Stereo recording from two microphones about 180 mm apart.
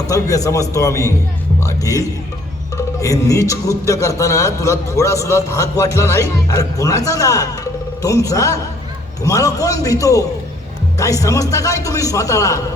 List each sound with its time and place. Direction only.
0.1 s a man's voice: 20° left (ahead or behind)